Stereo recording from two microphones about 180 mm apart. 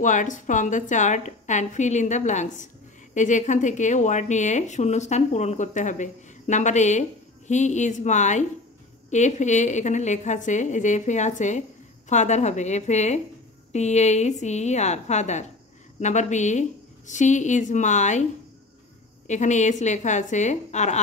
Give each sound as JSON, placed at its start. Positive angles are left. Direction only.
{"t": 0.0, "sound": "a woman's voice", "side_deg": 45}
{"t": 19.2, "sound": "speech", "side_deg": 40}